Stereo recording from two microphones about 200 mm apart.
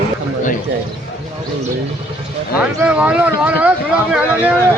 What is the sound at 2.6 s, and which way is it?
Speech, 5° right (ahead or behind).